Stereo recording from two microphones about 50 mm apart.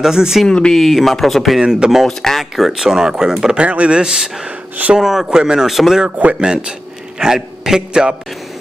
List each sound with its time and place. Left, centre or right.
0.0 s a man's voice: centre
0.5 s speech: centre
0.7 s speech: centre
1.6 s a man's voice: centre
2.0 s speech: centre
2.5 s a man's voice: centre
3.5 s speech: right
4.0 s a man's voice: centre
5.7 s speech: centre
6.4 s a man's voice: centre